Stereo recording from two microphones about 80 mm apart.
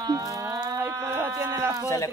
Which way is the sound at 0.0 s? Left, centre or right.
Right.